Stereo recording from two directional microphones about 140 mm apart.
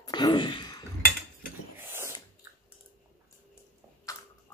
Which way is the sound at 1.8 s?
15° right (ahead or behind).